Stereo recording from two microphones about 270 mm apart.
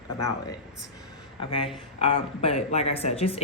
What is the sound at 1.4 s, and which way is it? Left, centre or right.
Speech, centre.